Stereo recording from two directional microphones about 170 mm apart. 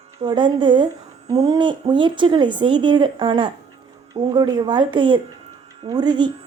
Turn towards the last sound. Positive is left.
turn(degrees=-25)  # may be behind; listen again after turning